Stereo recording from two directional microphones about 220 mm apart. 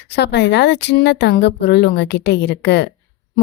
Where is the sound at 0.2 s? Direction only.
50° left (ahead or behind).